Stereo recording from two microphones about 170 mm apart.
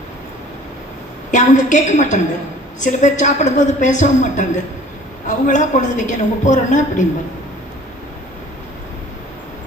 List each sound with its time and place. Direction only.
1.3 s a man's voice: 45° left (ahead or behind)